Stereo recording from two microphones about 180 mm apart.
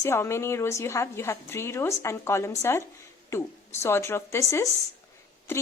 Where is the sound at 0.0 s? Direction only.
15° left (ahead or behind).